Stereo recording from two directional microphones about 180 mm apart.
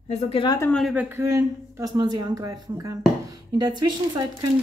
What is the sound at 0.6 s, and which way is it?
Speech, 5° left (ahead or behind).